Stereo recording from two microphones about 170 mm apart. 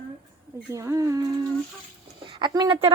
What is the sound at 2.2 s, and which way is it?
Speech, 25° right (ahead or behind).